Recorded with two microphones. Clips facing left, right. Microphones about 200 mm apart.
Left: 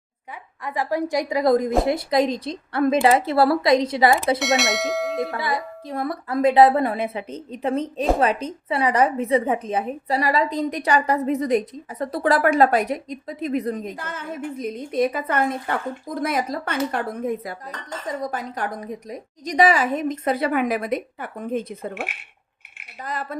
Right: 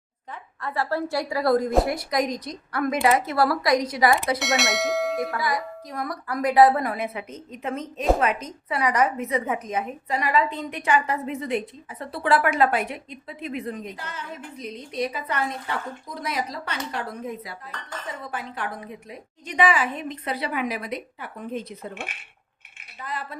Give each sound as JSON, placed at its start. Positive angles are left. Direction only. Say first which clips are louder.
{"t": 0.6, "sound": "a woman's voice", "louder": "left 2 dB", "side_deg": 15}
{"t": 4.4, "sound": "bell", "louder": "left 3 dB", "side_deg": 0}
{"t": 5.3, "sound": "a woman's voice", "louder": "left 1 dB", "side_deg": 25}
{"t": 18.1, "sound": "a woman's voice", "louder": "left 7 dB", "side_deg": 40}
{"t": 23.0, "sound": "a woman's voice", "louder": "left 4 dB", "side_deg": 45}